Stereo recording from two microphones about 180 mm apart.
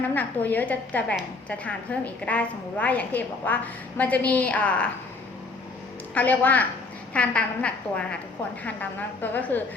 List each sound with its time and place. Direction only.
0.1 s a woman's voice: 10° left (ahead or behind)
6.1 s a woman's voice: 10° left (ahead or behind)